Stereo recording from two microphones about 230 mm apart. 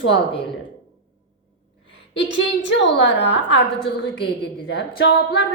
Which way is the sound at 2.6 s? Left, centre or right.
Left.